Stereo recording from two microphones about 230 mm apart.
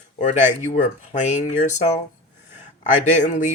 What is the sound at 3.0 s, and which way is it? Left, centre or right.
Speech, left.